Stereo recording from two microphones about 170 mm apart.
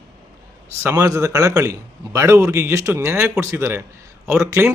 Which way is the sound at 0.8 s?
15° right (ahead or behind).